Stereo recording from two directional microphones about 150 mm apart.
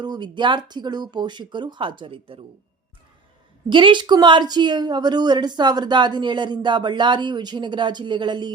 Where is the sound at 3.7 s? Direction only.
35° right (ahead or behind).